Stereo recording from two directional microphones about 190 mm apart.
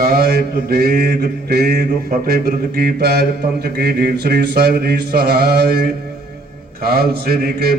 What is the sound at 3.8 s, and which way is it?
Mantra, 55° right (ahead or behind).